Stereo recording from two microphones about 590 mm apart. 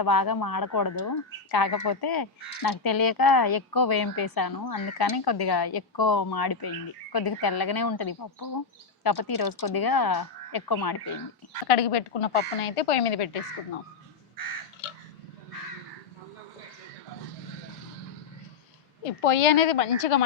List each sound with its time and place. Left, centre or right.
0.0 s speech: left
11.7 s speech: left
19.2 s speech: left